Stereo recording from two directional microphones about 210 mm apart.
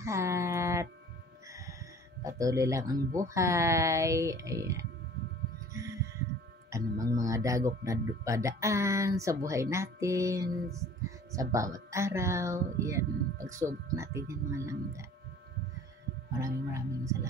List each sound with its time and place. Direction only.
0.0 s a sound: 15° right (ahead or behind)
2.2 s speech: 15° right (ahead or behind)
6.7 s speech: 15° right (ahead or behind)
16.3 s speech: 15° right (ahead or behind)